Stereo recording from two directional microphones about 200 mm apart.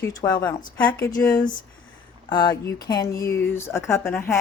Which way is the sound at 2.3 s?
20° left (ahead or behind).